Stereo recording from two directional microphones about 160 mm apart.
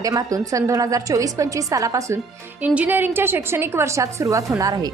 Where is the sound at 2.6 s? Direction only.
10° right (ahead or behind).